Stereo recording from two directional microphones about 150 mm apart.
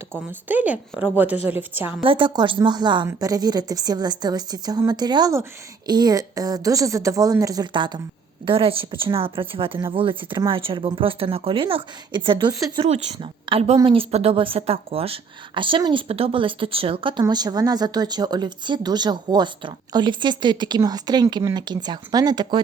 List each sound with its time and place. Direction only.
0.3 s a woman's voice: 10° right (ahead or behind)
2.0 s speech: 35° right (ahead or behind)
12.9 s a woman's voice: 45° right (ahead or behind); by 22.6 s 30° right (ahead or behind)